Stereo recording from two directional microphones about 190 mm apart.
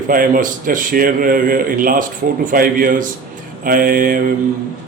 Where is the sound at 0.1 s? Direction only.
45° right (ahead or behind).